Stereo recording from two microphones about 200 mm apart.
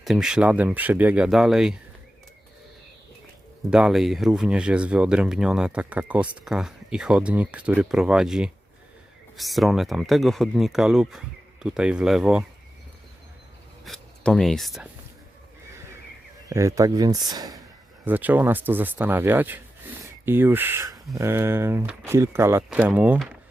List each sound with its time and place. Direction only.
0.0 s speech: centre (ahead or behind)
3.7 s speech: 5° right (ahead or behind)
13.8 s speech: centre (ahead or behind)
16.5 s speech: 15° right (ahead or behind)
18.0 s speech: 10° right (ahead or behind)